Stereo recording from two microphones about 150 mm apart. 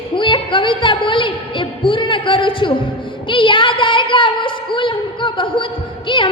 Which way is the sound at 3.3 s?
35° left (ahead or behind).